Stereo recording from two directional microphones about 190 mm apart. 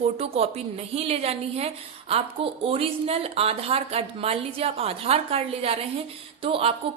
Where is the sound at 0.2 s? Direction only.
35° right (ahead or behind).